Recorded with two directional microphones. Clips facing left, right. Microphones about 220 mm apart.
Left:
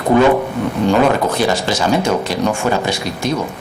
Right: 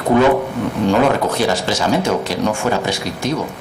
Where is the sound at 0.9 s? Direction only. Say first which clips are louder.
Left 1 dB; 25° left (ahead or behind).